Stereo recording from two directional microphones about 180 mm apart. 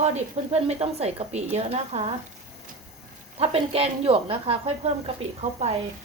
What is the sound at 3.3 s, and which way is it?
A woman's voice, 35° right (ahead or behind).